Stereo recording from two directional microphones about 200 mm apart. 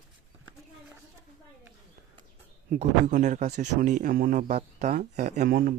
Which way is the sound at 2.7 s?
35° right (ahead or behind).